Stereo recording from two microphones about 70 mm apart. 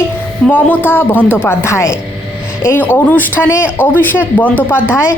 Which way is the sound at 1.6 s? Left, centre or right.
Left.